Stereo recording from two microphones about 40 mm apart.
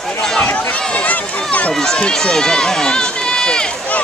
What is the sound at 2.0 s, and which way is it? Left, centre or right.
Speech, left.